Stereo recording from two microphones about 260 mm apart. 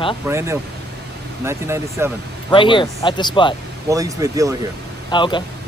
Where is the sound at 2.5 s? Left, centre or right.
Centre.